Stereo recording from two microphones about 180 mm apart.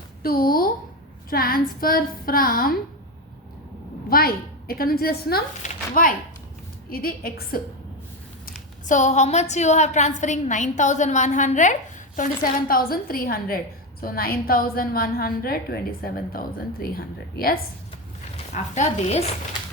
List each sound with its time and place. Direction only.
0.2 s a sound: 55° left (ahead or behind)
1.3 s a woman's voice: 55° left (ahead or behind)
4.1 s a woman's voice: 55° left (ahead or behind)
8.4 s a woman's voice: 45° left (ahead or behind)
18.5 s a woman's voice: 40° left (ahead or behind)